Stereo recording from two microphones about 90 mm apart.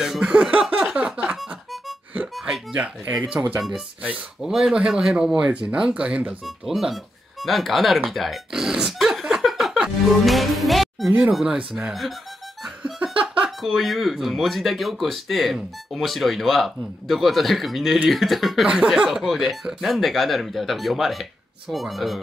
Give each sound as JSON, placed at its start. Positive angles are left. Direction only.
{"t": 0.0, "sound": "music", "side_deg": -5}
{"t": 1.4, "sound": "music", "side_deg": 0}
{"t": 2.4, "sound": "music", "side_deg": -10}
{"t": 3.4, "sound": "speech", "side_deg": -25}
{"t": 3.7, "sound": "speech", "side_deg": -15}
{"t": 6.4, "sound": "speech", "side_deg": 0}
{"t": 11.1, "sound": "speech", "side_deg": -15}
{"t": 12.6, "sound": "music", "side_deg": -5}
{"t": 13.6, "sound": "speech", "side_deg": 0}